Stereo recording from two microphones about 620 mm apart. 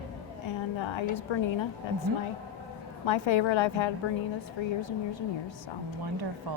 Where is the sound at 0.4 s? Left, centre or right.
Left.